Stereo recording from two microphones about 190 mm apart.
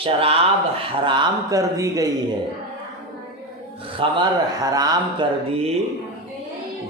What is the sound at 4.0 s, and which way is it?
A man's voice, 20° right (ahead or behind).